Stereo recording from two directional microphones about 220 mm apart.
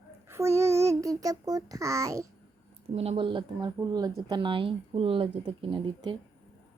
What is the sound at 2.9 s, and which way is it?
Speech, 25° right (ahead or behind).